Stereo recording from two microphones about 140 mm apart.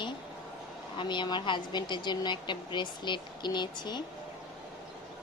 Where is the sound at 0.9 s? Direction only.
35° left (ahead or behind).